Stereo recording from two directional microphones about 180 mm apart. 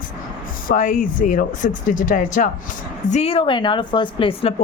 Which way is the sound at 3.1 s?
35° left (ahead or behind).